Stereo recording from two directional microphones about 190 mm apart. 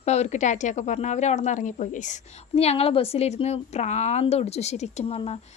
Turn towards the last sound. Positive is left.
turn(degrees=30)  # may be behind; listen again after turning